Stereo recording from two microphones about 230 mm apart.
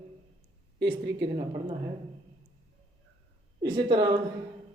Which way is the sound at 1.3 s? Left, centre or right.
Right.